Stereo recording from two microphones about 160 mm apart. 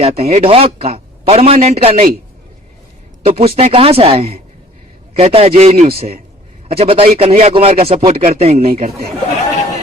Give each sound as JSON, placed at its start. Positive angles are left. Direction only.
{"t": 0.0, "sound": "a man's voice", "side_deg": -40}
{"t": 3.2, "sound": "a man's voice", "side_deg": -40}